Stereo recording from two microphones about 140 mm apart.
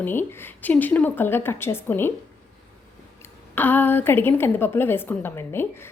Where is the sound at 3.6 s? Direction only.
15° left (ahead or behind).